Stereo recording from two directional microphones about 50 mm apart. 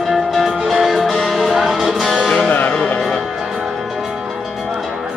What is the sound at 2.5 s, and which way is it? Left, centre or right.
Music, left.